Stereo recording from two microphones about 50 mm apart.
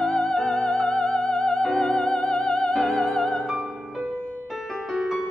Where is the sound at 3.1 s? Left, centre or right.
Centre.